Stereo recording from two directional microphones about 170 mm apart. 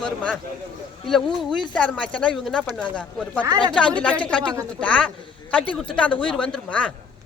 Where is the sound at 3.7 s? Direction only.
5° left (ahead or behind).